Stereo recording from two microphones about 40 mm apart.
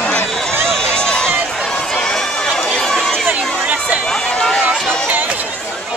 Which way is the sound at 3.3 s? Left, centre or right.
Right.